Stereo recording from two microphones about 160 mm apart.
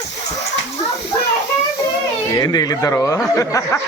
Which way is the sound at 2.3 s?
25° left (ahead or behind).